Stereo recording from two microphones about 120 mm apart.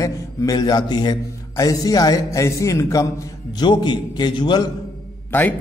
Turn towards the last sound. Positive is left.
turn(degrees=15)  # may be behind; listen again after turning